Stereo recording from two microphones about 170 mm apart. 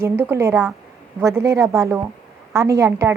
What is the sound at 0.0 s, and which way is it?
A woman's voice, 15° right (ahead or behind).